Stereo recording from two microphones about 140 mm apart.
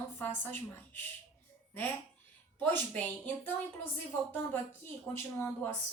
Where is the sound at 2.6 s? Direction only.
10° left (ahead or behind).